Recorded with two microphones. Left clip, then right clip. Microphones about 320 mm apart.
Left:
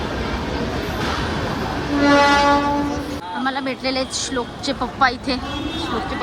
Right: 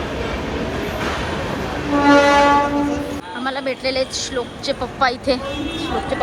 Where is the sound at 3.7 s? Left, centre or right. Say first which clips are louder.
Right 2 dB; centre.